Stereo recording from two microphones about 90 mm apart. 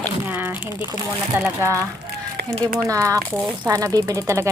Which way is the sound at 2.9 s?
35° right (ahead or behind).